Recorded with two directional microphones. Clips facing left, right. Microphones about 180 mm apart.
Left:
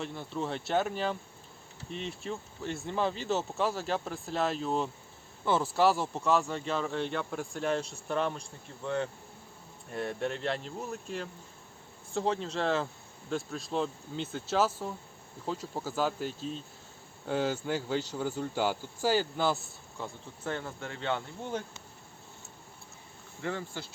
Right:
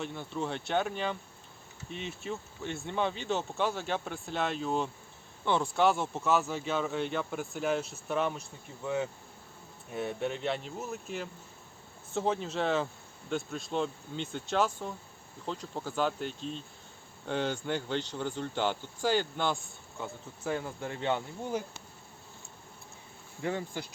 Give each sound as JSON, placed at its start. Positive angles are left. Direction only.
{"t": 0.0, "sound": "speech", "side_deg": 0}
{"t": 20.4, "sound": "speech", "side_deg": -10}
{"t": 23.4, "sound": "speech", "side_deg": -15}